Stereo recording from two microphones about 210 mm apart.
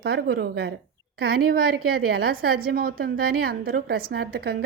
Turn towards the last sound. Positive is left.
turn(degrees=-45)  # may be behind; listen again after turning